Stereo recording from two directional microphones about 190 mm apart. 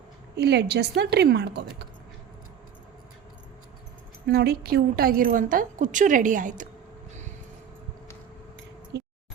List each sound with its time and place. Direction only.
0.3 s a woman's voice: 60° right (ahead or behind)
4.3 s a woman's voice: 55° right (ahead or behind)
8.9 s a sound: 65° right (ahead or behind)